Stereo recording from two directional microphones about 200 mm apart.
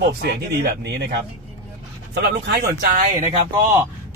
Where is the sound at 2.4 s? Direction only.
50° right (ahead or behind).